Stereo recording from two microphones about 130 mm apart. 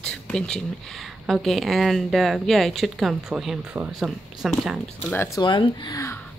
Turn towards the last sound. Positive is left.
turn(degrees=35)  # may be behind; listen again after turning